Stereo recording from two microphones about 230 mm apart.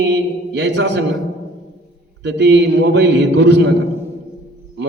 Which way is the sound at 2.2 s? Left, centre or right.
Right.